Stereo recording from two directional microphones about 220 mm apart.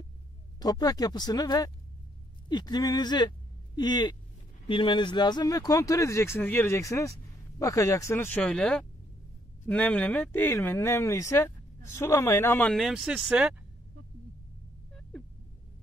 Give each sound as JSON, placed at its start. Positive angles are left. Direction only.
{"t": 0.6, "sound": "speech", "side_deg": 20}